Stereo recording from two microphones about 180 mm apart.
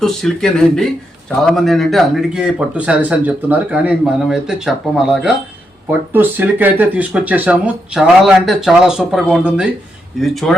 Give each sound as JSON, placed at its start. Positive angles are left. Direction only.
{"t": 0.0, "sound": "speech", "side_deg": 5}